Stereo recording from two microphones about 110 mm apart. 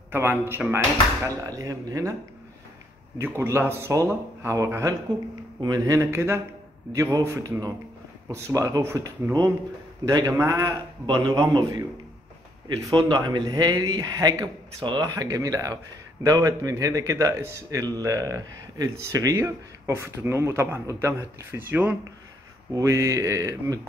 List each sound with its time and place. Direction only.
0.1 s a man's voice: 20° right (ahead or behind)
3.2 s a man's voice: 20° right (ahead or behind)
12.6 s a man's voice: 45° right (ahead or behind)
15.0 s a man's voice: 30° right (ahead or behind); by 21.9 s 15° right (ahead or behind)
22.7 s a man's voice: 30° right (ahead or behind)